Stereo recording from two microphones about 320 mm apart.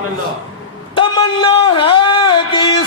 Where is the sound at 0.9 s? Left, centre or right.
Centre.